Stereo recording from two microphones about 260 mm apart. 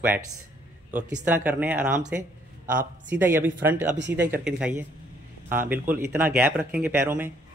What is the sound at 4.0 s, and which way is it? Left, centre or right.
Speech, right.